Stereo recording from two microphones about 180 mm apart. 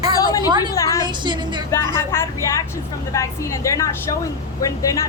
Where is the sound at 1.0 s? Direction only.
25° right (ahead or behind).